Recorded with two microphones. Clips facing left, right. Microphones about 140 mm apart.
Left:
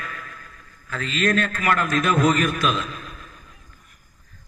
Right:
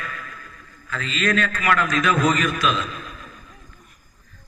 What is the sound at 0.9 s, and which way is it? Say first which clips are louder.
A man's voice: left 1 dB; 50° left (ahead or behind).